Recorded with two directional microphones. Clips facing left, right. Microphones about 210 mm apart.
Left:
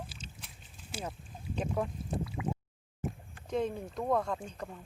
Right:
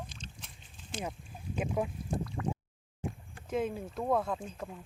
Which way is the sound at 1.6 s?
5° right (ahead or behind).